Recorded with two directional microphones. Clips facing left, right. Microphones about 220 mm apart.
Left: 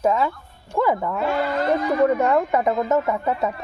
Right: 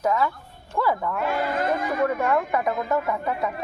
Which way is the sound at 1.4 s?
50° right (ahead or behind).